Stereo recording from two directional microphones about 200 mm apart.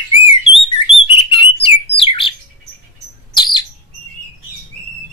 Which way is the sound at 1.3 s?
25° left (ahead or behind).